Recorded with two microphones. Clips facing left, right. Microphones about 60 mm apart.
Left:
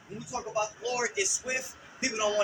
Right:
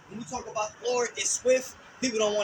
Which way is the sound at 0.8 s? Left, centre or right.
Left.